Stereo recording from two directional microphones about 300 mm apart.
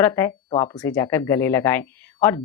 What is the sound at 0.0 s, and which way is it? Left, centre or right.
Speech, centre.